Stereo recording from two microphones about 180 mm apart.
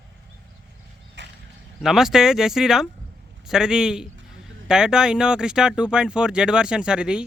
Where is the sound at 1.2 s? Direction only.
75° right (ahead or behind).